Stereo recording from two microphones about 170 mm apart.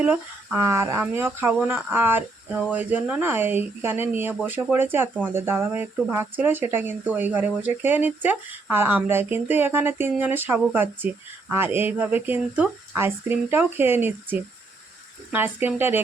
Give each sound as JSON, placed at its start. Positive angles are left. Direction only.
{"t": 0.0, "sound": "speech", "side_deg": -10}